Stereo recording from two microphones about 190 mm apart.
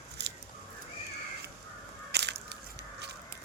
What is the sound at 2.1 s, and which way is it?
Crushing, 60° right (ahead or behind).